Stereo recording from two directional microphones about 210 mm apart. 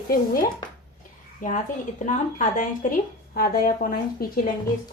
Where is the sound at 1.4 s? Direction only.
40° left (ahead or behind).